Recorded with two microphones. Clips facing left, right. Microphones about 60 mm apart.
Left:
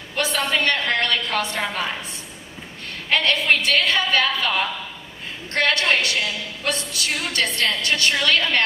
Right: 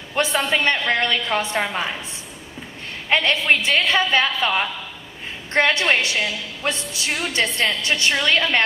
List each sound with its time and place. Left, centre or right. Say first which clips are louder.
0.2 s a woman's voice: right 2 dB; right
3.1 s a woman's voice: right 1 dB; right
5.5 s a woman's voice: right 2 dB; right